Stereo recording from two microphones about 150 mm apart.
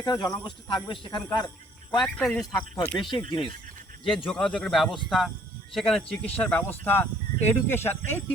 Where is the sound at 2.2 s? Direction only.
5° left (ahead or behind).